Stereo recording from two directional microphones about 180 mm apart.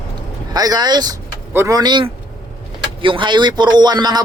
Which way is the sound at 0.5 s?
20° right (ahead or behind).